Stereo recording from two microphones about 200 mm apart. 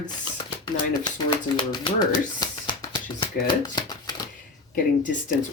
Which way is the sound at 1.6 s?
20° left (ahead or behind).